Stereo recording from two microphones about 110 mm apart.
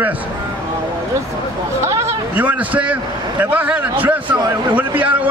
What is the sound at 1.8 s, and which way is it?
Speech, 25° right (ahead or behind).